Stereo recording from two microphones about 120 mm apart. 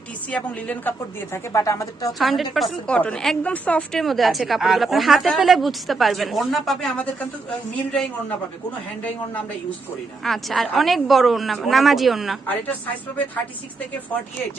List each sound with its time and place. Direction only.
0.3 s a woman's voice: 10° left (ahead or behind); by 2.1 s 30° left (ahead or behind)
2.1 s a woman's voice: centre (ahead or behind)
4.0 s a woman's voice: centre (ahead or behind)
10.2 s a woman's voice: centre (ahead or behind)